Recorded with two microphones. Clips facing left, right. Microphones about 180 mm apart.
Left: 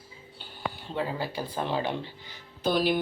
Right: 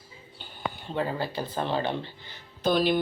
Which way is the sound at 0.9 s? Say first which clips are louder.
Right 2 dB; 5° left (ahead or behind).